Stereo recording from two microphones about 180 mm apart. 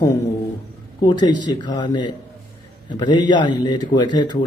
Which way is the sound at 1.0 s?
25° left (ahead or behind).